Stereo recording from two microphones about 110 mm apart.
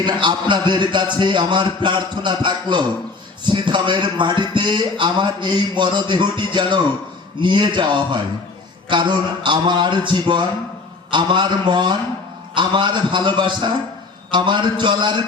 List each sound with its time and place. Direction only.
0.0 s a man's voice: 45° right (ahead or behind)